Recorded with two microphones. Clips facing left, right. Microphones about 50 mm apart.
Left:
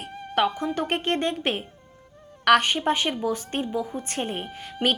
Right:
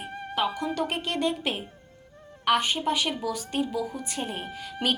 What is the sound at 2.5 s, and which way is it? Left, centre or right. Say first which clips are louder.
A woman's voice: left 5 dB; left.